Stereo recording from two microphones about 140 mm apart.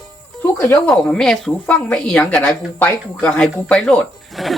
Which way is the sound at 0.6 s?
15° left (ahead or behind).